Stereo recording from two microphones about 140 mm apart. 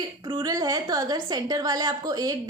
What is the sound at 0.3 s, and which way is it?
A woman's voice, 30° right (ahead or behind).